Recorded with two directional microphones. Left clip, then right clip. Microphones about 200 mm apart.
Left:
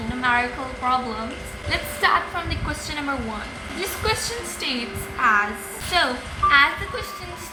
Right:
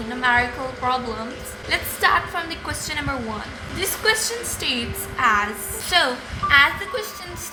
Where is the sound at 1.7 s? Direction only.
35° right (ahead or behind).